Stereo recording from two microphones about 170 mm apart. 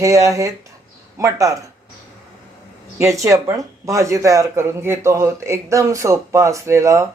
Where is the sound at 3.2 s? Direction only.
20° right (ahead or behind).